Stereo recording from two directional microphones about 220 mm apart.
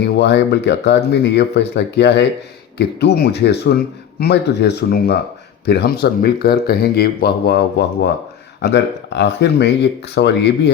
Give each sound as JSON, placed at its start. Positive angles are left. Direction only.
{"t": 0.0, "sound": "speech", "side_deg": 50}